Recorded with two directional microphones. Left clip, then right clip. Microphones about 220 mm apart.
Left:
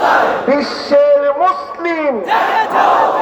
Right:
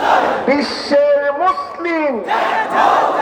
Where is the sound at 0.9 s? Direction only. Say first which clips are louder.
Left 3 dB; 20° right (ahead or behind).